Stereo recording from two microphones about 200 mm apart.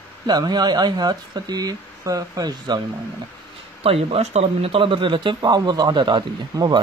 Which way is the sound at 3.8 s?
30° right (ahead or behind).